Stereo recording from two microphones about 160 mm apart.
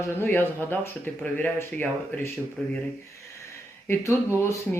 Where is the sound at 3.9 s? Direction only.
15° left (ahead or behind).